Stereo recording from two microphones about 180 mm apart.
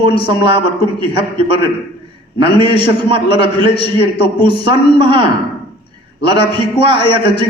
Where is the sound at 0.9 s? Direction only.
30° right (ahead or behind).